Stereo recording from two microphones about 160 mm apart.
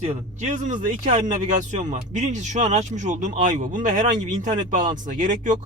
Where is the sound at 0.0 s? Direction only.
45° right (ahead or behind).